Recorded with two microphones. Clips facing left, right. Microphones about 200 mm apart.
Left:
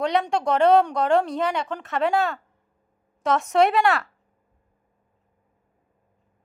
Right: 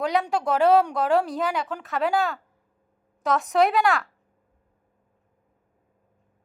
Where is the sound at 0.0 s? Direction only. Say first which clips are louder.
Left 1 dB; 5° right (ahead or behind).